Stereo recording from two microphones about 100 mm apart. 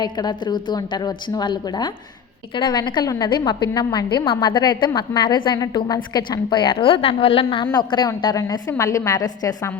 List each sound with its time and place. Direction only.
0.0 s a woman's voice: 45° left (ahead or behind)
4.3 s a woman's voice: 55° left (ahead or behind)